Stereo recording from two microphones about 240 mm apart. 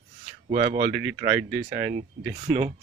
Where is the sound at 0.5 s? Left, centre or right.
Right.